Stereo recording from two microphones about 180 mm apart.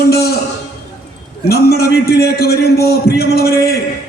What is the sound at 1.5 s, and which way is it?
A man's voice, 60° left (ahead or behind).